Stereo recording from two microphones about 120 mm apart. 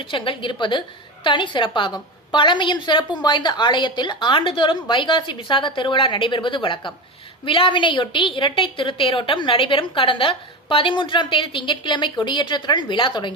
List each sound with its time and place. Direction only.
0.0 s a woman's voice: 45° left (ahead or behind)